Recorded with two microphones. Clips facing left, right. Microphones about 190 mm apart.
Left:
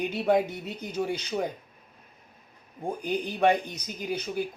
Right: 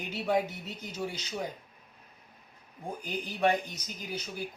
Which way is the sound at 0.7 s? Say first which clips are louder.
Left 7 dB; 55° left (ahead or behind).